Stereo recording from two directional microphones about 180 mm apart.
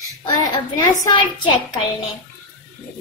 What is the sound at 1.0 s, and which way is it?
Speech, 25° left (ahead or behind).